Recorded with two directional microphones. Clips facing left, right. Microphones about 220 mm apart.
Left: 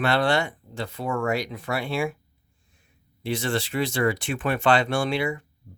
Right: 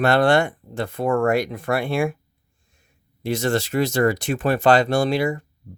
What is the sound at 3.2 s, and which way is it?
Speech, 45° right (ahead or behind).